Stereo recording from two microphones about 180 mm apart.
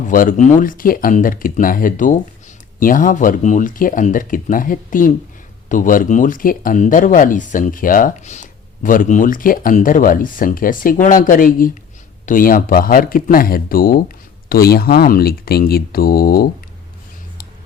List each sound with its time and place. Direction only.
0.1 s speech: 50° left (ahead or behind)